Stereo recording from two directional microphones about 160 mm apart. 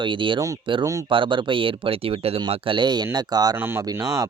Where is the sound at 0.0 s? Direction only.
30° right (ahead or behind).